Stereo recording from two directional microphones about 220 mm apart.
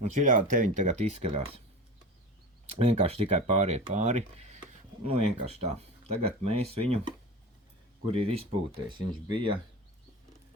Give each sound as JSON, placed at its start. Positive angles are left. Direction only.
{"t": 0.0, "sound": "speech", "side_deg": -35}
{"t": 2.7, "sound": "speech", "side_deg": -30}